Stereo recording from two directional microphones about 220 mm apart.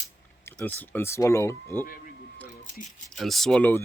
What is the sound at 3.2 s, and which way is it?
Speech, centre (ahead or behind).